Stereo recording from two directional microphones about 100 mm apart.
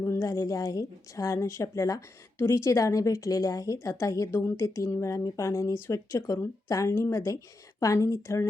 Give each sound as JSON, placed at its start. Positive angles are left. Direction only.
{"t": 0.0, "sound": "a woman's voice", "side_deg": 30}